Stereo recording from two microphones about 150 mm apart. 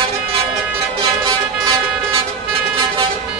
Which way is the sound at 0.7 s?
20° right (ahead or behind).